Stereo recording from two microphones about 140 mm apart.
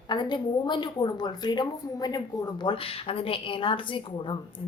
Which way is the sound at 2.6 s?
40° left (ahead or behind).